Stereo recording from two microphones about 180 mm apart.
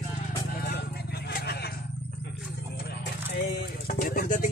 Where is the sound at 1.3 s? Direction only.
60° left (ahead or behind).